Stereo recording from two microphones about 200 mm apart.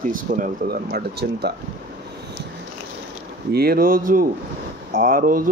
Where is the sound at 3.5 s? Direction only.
50° right (ahead or behind).